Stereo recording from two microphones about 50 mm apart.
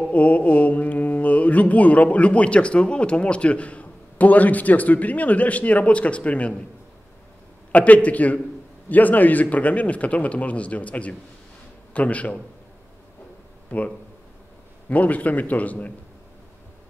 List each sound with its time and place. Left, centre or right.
0.1 s mantra: left
7.7 s a man's voice: left
8.8 s mantra: left
13.7 s a man's voice: left